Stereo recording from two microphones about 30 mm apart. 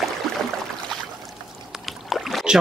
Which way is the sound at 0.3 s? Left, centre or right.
Centre.